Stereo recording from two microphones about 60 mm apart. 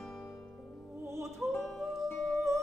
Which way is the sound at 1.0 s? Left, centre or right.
Right.